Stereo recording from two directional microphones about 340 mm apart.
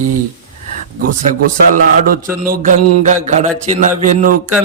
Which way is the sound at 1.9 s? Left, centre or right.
Right.